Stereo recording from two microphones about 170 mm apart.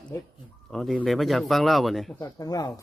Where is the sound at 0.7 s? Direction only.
5° left (ahead or behind).